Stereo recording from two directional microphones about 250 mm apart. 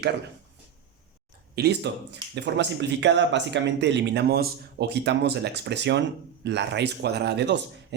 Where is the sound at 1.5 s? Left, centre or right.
Right.